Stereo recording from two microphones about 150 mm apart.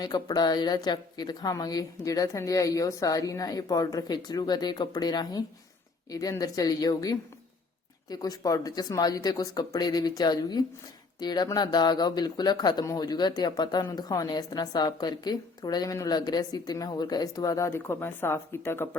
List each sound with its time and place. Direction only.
0.0 s speech: 25° left (ahead or behind)